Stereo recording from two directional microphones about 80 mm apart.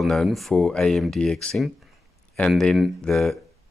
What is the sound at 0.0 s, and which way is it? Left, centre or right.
Speech, centre.